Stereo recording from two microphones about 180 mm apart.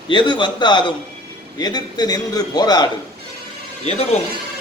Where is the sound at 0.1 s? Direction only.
25° left (ahead or behind).